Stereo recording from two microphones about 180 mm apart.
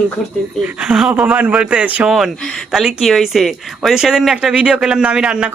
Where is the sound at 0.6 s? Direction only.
Centre (ahead or behind).